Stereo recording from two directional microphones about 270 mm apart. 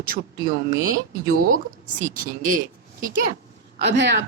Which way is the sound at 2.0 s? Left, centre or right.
Right.